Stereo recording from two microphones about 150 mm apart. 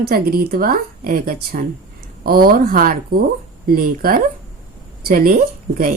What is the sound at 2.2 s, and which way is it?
A woman's voice, 85° right.